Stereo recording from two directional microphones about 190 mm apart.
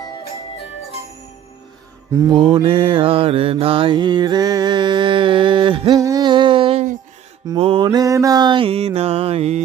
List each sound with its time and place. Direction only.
2.4 s mantra: 30° right (ahead or behind)